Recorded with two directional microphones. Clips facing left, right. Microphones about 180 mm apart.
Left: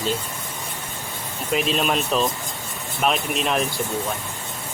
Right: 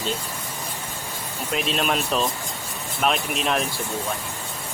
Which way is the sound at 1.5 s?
Centre (ahead or behind).